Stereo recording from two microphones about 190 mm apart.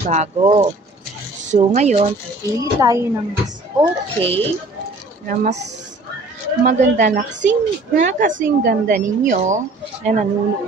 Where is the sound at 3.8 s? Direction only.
30° right (ahead or behind).